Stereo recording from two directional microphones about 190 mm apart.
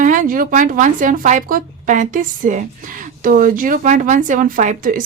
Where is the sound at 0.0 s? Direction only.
45° right (ahead or behind).